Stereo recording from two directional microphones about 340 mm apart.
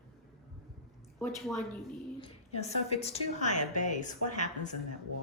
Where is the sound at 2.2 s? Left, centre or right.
Centre.